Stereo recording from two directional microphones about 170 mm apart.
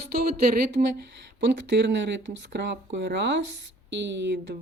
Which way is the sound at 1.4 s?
90° right.